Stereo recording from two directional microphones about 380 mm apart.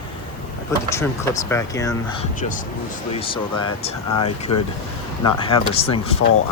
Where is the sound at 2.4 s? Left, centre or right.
Left.